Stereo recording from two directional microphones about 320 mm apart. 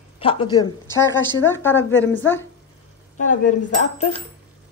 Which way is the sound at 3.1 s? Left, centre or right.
Left.